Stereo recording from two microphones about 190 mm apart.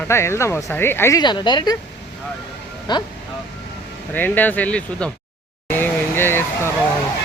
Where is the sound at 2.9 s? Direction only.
20° left (ahead or behind).